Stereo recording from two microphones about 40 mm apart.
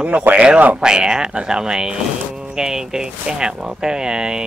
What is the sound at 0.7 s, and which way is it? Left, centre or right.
Speech, centre.